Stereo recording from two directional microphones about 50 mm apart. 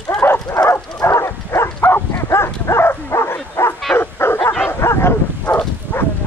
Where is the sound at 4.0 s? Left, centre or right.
Left.